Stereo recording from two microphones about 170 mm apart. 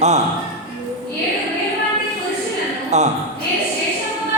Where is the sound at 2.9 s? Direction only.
40° right (ahead or behind).